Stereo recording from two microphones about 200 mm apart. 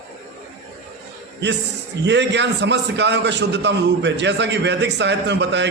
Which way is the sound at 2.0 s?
60° right (ahead or behind).